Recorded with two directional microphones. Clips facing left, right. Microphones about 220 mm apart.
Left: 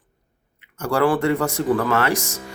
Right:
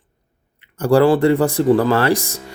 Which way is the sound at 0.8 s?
30° right (ahead or behind).